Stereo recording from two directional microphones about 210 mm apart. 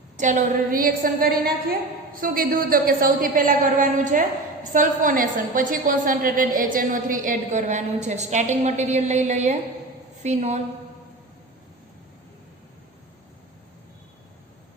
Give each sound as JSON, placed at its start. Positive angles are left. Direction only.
{"t": 0.2, "sound": "a woman's voice", "side_deg": -35}